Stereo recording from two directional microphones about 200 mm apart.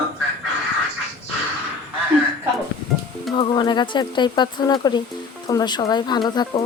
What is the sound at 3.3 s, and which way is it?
Speech, 25° left (ahead or behind).